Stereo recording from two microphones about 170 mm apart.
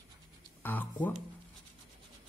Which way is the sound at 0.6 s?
10° left (ahead or behind).